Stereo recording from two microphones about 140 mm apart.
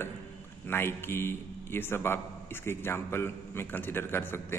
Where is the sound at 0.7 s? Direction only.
15° left (ahead or behind).